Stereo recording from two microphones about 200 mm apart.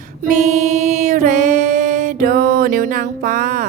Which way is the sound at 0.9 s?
35° right (ahead or behind).